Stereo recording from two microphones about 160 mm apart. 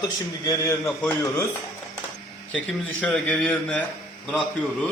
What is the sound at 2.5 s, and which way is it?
A man's voice, 5° left (ahead or behind).